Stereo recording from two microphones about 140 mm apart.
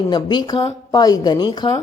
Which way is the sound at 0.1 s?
30° left (ahead or behind).